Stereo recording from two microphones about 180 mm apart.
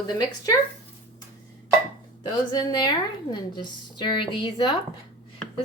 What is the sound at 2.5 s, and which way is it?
A woman's voice, 25° left (ahead or behind).